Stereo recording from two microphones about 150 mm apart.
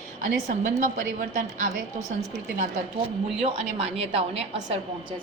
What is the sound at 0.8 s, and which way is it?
A woman's voice, 60° right (ahead or behind).